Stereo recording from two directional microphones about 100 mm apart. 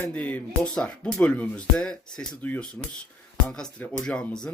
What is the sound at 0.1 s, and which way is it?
Speech, 15° left (ahead or behind).